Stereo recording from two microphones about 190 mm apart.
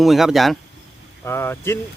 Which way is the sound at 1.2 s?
15° left (ahead or behind).